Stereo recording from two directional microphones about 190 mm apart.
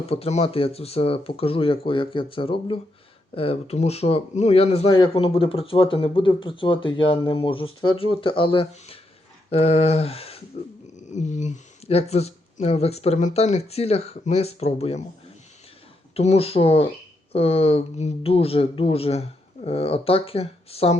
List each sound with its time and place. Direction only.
0.0 s speech: 30° left (ahead or behind)
16.1 s speech: 30° left (ahead or behind)